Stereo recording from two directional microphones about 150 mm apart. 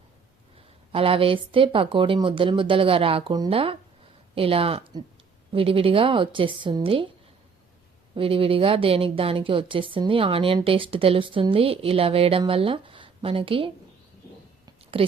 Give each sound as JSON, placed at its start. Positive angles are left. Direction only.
{"t": 0.9, "sound": "speech", "side_deg": -40}
{"t": 8.1, "sound": "speech", "side_deg": -35}
{"t": 15.0, "sound": "speech", "side_deg": -35}